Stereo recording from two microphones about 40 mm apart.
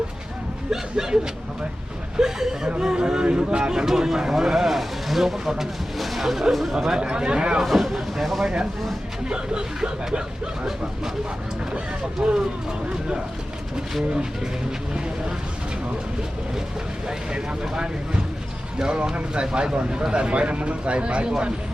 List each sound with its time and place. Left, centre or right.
0.7 s speech: centre
6.7 s speech: centre
7.6 s speech: centre
9.3 s speech: right
12.2 s speech: centre
17.1 s speech: right